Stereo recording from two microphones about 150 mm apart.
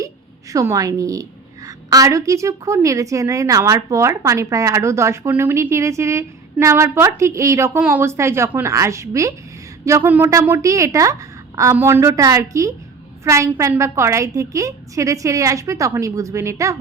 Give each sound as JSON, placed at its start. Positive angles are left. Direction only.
{"t": 0.5, "sound": "a woman's voice", "side_deg": -20}